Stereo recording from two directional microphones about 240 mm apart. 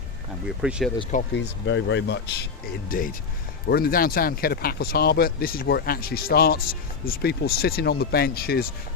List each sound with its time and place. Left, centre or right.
0.6 s speech: centre
1.4 s speech: left
2.9 s speech: left